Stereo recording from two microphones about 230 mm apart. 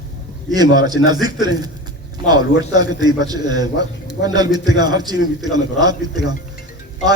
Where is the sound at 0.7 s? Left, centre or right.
Centre.